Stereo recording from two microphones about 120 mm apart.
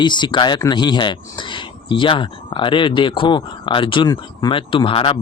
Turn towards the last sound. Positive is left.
turn(degrees=50)  # may be behind; listen again after turning